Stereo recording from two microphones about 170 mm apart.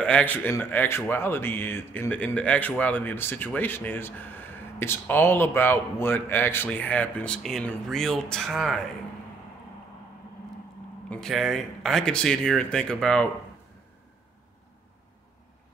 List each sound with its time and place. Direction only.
0.0 s speech: 10° left (ahead or behind)
11.1 s speech: centre (ahead or behind)